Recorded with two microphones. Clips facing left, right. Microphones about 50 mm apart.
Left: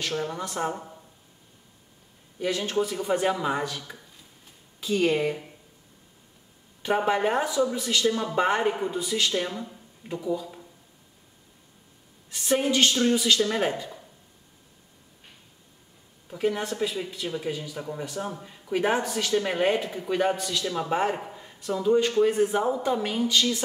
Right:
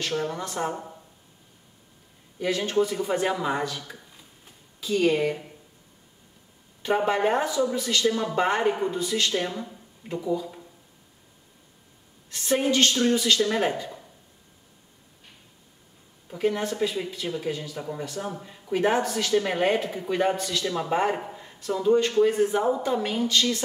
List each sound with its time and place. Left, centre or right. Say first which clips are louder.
0.0 s a woman's voice: right 1 dB; centre
2.4 s a woman's voice: right 2 dB; centre
6.8 s a woman's voice: right 1 dB; centre
12.3 s a woman's voice: right 1 dB; centre
13.5 s a woman's voice: right 1 dB; centre
16.3 s a woman's voice: right 1 dB; centre
18.3 s a woman's voice: right 1 dB; centre
18.7 s a woman's voice: right 2 dB; centre